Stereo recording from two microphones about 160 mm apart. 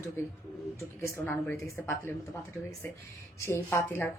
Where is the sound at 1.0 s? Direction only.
15° left (ahead or behind).